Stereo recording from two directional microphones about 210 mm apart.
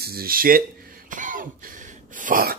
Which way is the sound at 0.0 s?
45° right (ahead or behind).